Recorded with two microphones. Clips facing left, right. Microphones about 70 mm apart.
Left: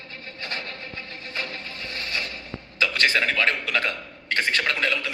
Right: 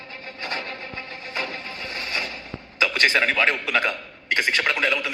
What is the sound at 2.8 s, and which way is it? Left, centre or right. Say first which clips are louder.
A man's voice: right 2 dB; right.